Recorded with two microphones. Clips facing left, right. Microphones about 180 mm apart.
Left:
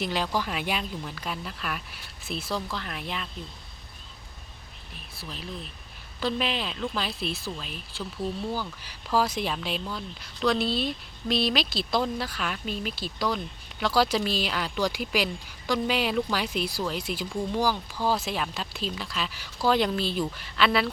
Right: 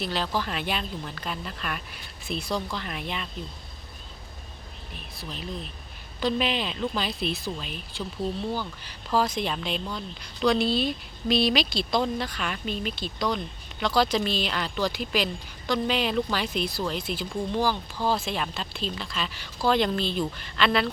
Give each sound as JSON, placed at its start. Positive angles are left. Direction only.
{"t": 0.0, "sound": "speech", "side_deg": 15}
{"t": 5.2, "sound": "speech", "side_deg": 0}